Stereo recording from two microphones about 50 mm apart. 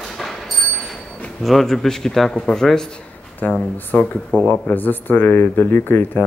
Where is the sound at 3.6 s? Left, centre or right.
Left.